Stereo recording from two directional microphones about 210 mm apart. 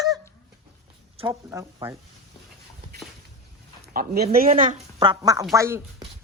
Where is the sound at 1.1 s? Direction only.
25° right (ahead or behind).